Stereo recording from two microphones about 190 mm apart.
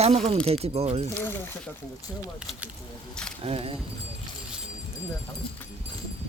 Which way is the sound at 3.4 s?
30° right (ahead or behind).